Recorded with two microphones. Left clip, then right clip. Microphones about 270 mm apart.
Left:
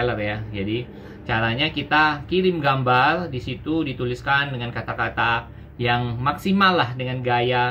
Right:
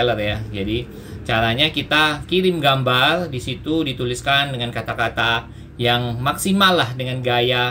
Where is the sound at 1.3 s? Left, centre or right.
Centre.